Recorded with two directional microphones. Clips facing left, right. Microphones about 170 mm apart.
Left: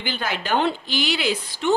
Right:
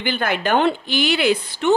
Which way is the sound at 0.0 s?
55° right (ahead or behind).